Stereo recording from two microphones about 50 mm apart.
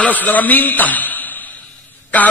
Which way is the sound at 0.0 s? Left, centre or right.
Left.